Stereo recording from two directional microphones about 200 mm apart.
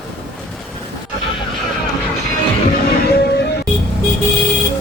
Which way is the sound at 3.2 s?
55° left (ahead or behind).